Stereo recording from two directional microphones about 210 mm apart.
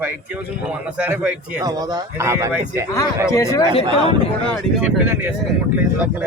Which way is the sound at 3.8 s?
25° right (ahead or behind).